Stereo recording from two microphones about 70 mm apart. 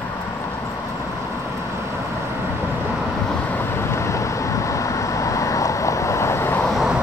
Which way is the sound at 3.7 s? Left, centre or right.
Left.